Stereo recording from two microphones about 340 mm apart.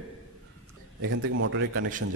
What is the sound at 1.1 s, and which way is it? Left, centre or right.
Speech, right.